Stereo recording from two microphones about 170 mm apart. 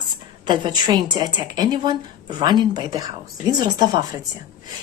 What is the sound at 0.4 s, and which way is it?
A woman's voice, 25° right (ahead or behind).